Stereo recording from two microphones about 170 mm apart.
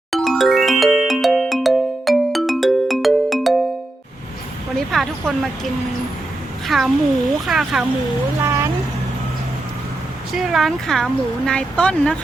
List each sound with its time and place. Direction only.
0.1 s music: centre (ahead or behind)
4.9 s speech: centre (ahead or behind)
8.4 s a sound: 15° right (ahead or behind)
10.3 s speech: centre (ahead or behind)